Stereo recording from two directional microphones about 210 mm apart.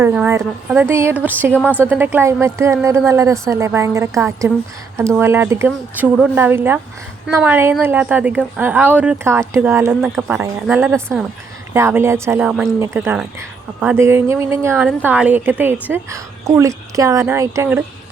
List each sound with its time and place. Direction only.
0.0 s a woman's voice: 10° right (ahead or behind)